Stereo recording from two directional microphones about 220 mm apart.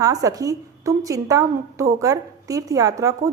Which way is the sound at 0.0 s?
15° right (ahead or behind).